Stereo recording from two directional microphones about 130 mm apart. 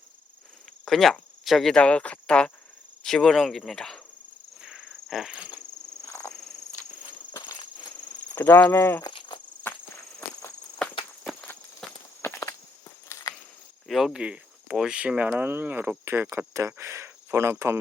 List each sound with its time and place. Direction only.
0.9 s speech: centre (ahead or behind)
4.6 s a sound: 5° right (ahead or behind)
7.3 s walk: 35° left (ahead or behind)
8.4 s speech: 15° left (ahead or behind)
9.0 s insect: 35° left (ahead or behind)
11.8 s walk: 5° left (ahead or behind)
12.2 s walk: 20° left (ahead or behind)
13.1 s a sound: 25° left (ahead or behind)
13.8 s speech: centre (ahead or behind); by 17.7 s 20° right (ahead or behind)